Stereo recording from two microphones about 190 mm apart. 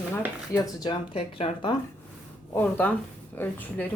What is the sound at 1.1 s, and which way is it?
Speech, 30° left (ahead or behind).